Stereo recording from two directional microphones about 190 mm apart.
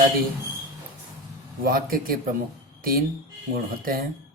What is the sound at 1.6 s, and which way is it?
Speech, 50° right (ahead or behind).